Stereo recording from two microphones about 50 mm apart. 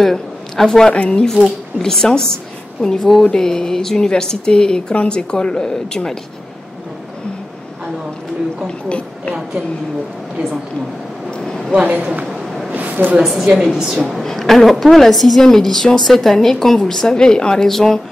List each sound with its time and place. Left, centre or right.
0.0 s speech: centre
0.9 s speech: left
1.8 s a woman's voice: centre
8.6 s speech: left
11.2 s a sound: centre
11.7 s a man's voice: right
12.3 s a sound: centre
12.7 s a sound: right
13.2 s a woman's voice: centre